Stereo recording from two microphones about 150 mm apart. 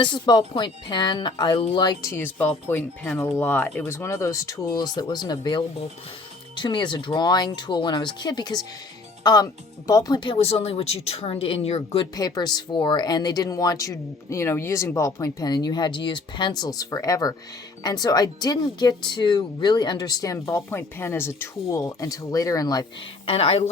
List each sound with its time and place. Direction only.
0.0 s speech: 30° left (ahead or behind)
12.1 s speech: 25° left (ahead or behind)
23.2 s speech: 40° left (ahead or behind)